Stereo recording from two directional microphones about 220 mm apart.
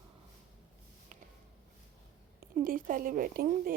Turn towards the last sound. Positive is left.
turn(degrees=-40)  # may be behind; listen again after turning